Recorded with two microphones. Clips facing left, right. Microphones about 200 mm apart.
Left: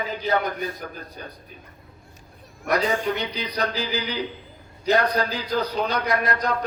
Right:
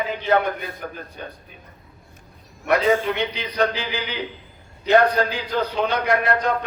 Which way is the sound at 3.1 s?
40° left (ahead or behind).